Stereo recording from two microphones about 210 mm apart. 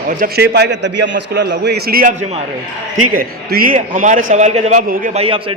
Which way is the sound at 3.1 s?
45° right (ahead or behind).